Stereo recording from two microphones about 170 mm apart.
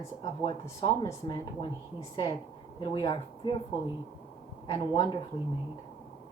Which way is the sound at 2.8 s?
25° left (ahead or behind).